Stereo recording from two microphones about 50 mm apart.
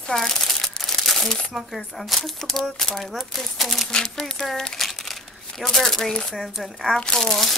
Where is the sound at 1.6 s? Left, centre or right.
Centre.